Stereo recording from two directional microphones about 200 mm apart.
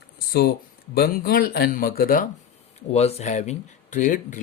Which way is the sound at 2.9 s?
30° left (ahead or behind).